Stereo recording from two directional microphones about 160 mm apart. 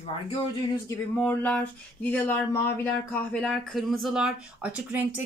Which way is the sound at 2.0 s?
10° left (ahead or behind).